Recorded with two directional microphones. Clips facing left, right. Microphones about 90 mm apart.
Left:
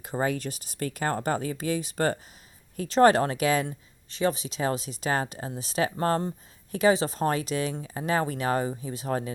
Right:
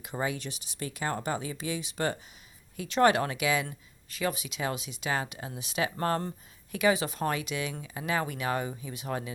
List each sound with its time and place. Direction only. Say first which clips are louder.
0.0 s speech: left 5 dB; 40° left (ahead or behind)
3.7 s speech: left 5 dB; 30° left (ahead or behind)